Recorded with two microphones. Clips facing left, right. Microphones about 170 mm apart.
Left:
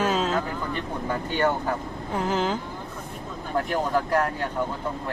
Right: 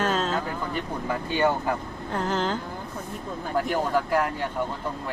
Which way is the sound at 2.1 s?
10° left (ahead or behind).